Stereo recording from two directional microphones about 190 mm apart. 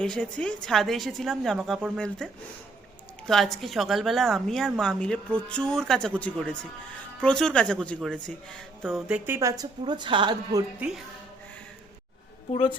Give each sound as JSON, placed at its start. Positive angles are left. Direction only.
{"t": 0.0, "sound": "a woman's voice", "side_deg": 5}
{"t": 10.8, "sound": "a woman's voice", "side_deg": -5}
{"t": 12.5, "sound": "a woman's voice", "side_deg": 30}